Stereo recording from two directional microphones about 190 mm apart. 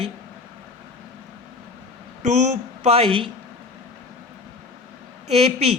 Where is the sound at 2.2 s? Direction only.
35° right (ahead or behind).